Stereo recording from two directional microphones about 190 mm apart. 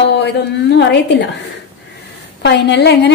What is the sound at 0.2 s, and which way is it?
A woman's voice, 60° left (ahead or behind).